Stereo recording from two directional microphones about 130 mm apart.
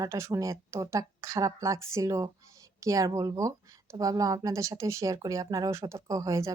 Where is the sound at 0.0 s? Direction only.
20° right (ahead or behind).